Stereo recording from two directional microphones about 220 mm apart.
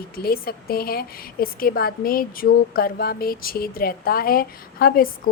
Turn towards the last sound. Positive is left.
turn(degrees=40)  # may be behind; listen again after turning